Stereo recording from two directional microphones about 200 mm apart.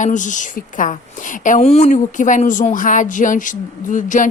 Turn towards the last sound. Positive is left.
turn(degrees=40)  # may be behind; listen again after turning